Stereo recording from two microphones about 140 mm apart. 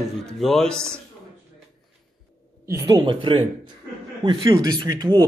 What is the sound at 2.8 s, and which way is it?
Speech, 35° right (ahead or behind).